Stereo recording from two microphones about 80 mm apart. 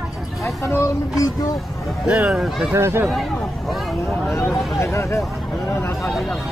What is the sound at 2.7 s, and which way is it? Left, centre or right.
Speech, right.